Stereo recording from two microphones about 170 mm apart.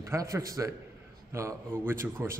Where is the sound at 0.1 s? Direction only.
20° right (ahead or behind).